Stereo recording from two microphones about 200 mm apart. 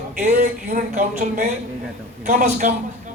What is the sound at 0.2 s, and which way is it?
Speech, 40° right (ahead or behind).